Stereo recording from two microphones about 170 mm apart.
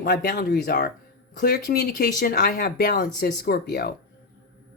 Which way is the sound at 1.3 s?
55° left (ahead or behind).